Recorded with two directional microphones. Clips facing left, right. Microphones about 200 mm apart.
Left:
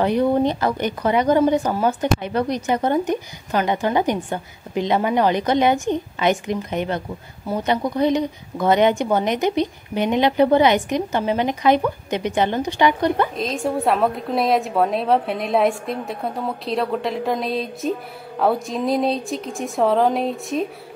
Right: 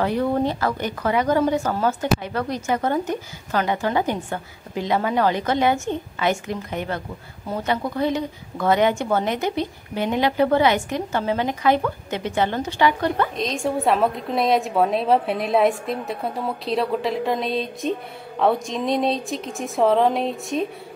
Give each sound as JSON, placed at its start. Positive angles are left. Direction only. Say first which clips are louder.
{"t": 0.0, "sound": "a woman's voice", "louder": "left 3 dB", "side_deg": 20}
{"t": 13.4, "sound": "a woman's voice", "louder": "left 1 dB", "side_deg": 0}